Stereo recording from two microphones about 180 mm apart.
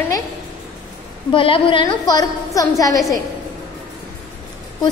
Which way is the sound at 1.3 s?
30° left (ahead or behind).